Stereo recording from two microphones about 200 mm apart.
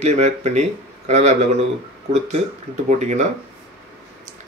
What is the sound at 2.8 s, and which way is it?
Speech, 35° right (ahead or behind).